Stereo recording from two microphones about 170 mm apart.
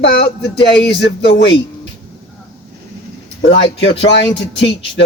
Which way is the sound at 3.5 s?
90° left.